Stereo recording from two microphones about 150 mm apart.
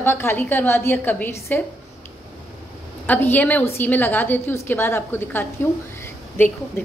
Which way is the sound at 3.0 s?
10° left (ahead or behind).